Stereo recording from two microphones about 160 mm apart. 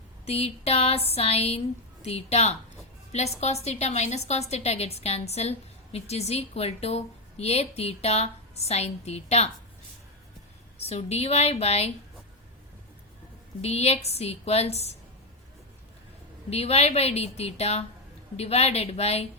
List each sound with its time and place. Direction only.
0.3 s a woman's voice: 40° left (ahead or behind)
10.8 s a woman's voice: 40° left (ahead or behind)
13.6 s a woman's voice: 40° left (ahead or behind)
16.5 s a woman's voice: 40° left (ahead or behind)